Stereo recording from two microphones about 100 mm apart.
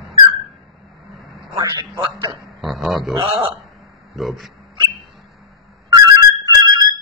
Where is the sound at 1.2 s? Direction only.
Centre (ahead or behind).